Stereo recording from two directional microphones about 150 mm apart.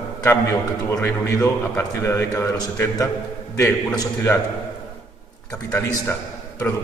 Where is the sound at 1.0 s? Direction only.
20° left (ahead or behind).